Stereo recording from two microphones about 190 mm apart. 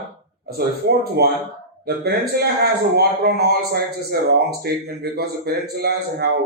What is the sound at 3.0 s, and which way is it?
A man's voice, 55° right (ahead or behind).